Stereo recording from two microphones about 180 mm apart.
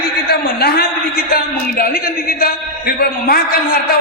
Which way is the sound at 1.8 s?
55° left (ahead or behind).